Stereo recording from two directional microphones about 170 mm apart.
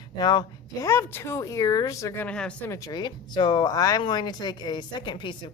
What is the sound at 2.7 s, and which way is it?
Speech, 20° left (ahead or behind).